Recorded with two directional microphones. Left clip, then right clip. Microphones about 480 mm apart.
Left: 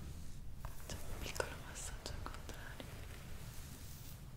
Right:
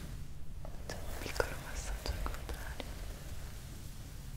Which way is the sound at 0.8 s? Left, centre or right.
Centre.